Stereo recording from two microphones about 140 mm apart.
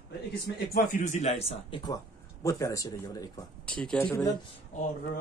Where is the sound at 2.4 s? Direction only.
25° left (ahead or behind).